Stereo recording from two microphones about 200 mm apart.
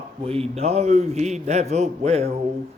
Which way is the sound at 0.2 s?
30° right (ahead or behind).